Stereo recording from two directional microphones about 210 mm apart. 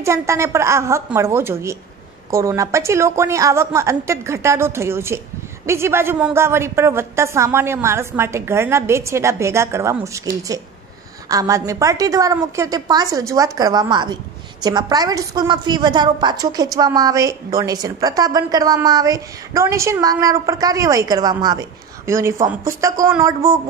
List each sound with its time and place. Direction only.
0.0 s a woman's voice: 15° right (ahead or behind)